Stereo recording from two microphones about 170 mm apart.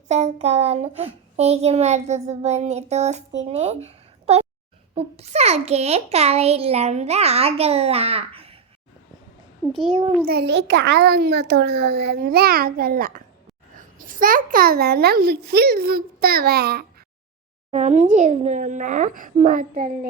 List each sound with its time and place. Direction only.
0.1 s a child's voice: 40° right (ahead or behind)
9.7 s a child's voice: 30° right (ahead or behind)
10.2 s a child's voice: 70° right (ahead or behind)
17.7 s speech: 40° right (ahead or behind)